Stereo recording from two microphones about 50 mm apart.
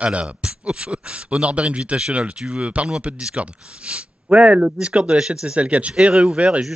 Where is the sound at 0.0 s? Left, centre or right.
Right.